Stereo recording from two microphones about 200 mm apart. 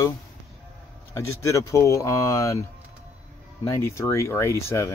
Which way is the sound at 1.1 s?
15° left (ahead or behind).